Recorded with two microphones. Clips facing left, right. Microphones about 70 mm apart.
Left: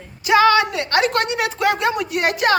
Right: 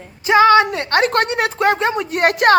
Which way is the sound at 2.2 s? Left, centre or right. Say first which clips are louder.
Right 6 dB; right.